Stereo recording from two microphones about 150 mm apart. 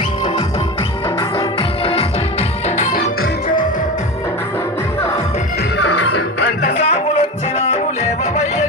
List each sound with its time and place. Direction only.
1.5 s music: 40° left (ahead or behind)
2.6 s music: 50° left (ahead or behind)
2.9 s music: 70° left (ahead or behind)
6.6 s music: 45° left (ahead or behind)